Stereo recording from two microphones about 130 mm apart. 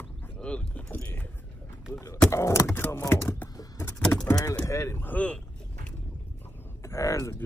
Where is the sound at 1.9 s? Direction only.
20° left (ahead or behind).